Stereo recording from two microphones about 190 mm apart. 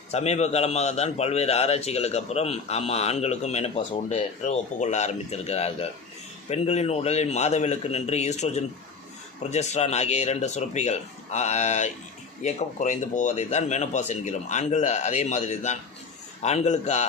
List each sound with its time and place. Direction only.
0.1 s a man's voice: 35° left (ahead or behind)